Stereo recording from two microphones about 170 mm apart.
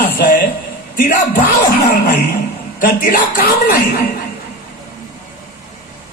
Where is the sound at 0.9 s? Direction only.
60° left (ahead or behind).